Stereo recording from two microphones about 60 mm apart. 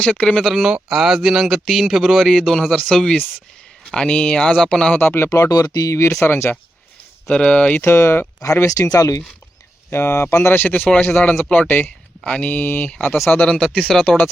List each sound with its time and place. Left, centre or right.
0.0 s speech: centre
0.4 s speech: centre
4.9 s speech: left
5.3 s speech: left
6.2 s speech: left
7.3 s speech: centre
7.9 s speech: left
8.6 s speech: left
9.9 s speech: left
11.1 s speech: left
11.7 s speech: left
13.3 s speech: centre